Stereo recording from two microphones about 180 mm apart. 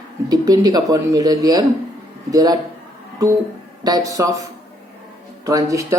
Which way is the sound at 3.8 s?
20° right (ahead or behind).